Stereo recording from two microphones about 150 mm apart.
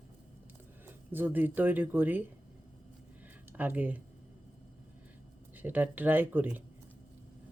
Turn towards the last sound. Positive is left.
turn(degrees=-10)  # may be behind; listen again after turning